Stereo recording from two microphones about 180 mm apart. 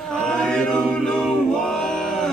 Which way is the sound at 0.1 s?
5° left (ahead or behind).